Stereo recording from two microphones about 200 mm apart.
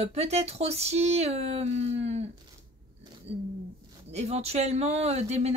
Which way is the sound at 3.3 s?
30° right (ahead or behind).